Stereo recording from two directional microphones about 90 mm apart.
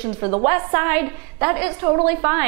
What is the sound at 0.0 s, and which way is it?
A woman's voice, 20° right (ahead or behind).